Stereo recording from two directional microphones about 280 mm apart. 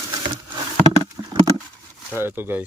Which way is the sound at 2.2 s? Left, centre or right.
Centre.